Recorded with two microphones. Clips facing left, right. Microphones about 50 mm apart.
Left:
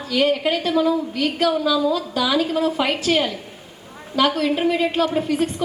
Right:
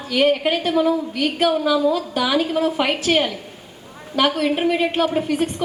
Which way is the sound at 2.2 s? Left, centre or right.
Centre.